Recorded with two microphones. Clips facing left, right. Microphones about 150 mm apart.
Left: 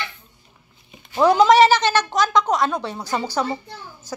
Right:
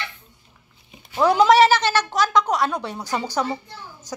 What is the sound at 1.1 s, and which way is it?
A woman's voice, 5° right (ahead or behind).